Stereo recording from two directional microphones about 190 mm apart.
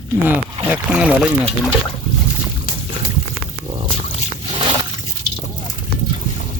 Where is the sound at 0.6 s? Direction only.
5° right (ahead or behind).